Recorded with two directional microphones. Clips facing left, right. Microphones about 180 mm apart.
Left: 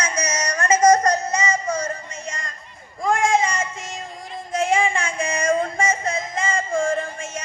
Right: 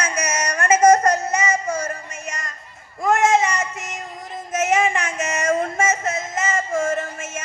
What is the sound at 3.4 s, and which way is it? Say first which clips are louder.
Music: right 1 dB; 40° right (ahead or behind).